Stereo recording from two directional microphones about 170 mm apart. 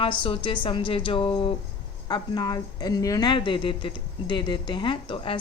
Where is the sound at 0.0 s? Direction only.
30° left (ahead or behind).